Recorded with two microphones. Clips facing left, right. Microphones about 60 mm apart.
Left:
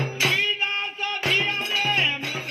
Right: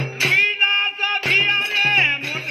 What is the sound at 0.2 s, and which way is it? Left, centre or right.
Music, right.